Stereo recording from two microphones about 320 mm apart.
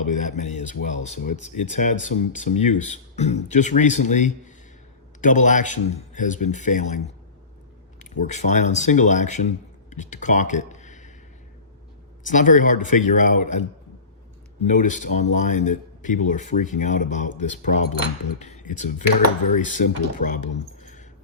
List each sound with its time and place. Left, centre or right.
0.0 s speech: left
12.2 s speech: left